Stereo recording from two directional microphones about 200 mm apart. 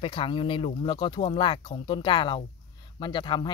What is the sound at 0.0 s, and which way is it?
Speech, 25° left (ahead or behind).